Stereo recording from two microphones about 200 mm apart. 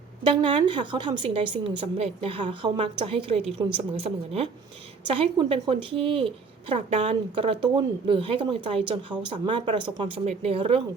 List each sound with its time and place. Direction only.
0.3 s a woman's voice: 25° right (ahead or behind)